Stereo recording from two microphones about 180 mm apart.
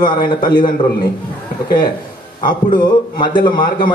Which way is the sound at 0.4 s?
25° left (ahead or behind).